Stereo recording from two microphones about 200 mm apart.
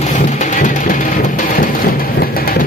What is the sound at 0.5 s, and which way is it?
Music, 40° left (ahead or behind).